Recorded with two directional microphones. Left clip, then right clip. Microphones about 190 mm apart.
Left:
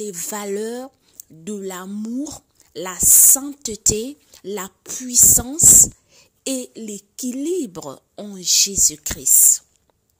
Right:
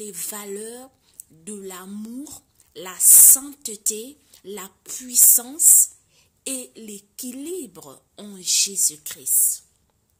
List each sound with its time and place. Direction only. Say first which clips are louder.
0.0 s speech: left 7 dB; 40° left (ahead or behind)